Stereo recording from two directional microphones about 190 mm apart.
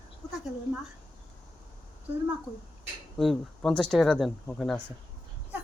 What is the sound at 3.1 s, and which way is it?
Speech, centre (ahead or behind).